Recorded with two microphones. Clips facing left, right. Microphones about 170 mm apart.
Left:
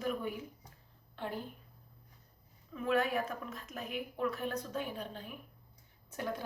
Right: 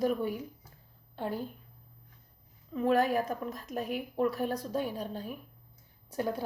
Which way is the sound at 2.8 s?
40° right (ahead or behind).